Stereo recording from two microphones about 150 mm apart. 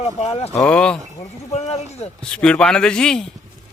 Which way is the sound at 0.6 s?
5° left (ahead or behind).